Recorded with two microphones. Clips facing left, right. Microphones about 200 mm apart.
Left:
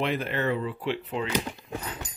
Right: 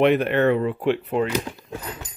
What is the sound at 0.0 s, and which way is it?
Speech, 65° right (ahead or behind).